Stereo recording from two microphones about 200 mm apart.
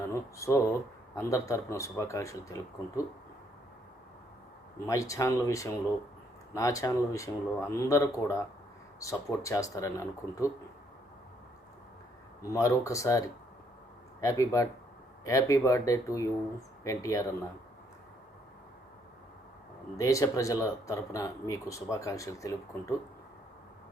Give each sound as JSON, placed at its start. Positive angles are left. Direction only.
{"t": 0.1, "sound": "speech", "side_deg": 15}
{"t": 4.9, "sound": "speech", "side_deg": 15}
{"t": 12.4, "sound": "speech", "side_deg": 15}
{"t": 20.0, "sound": "speech", "side_deg": 15}